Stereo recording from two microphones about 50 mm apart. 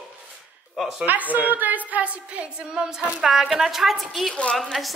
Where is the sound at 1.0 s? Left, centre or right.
Right.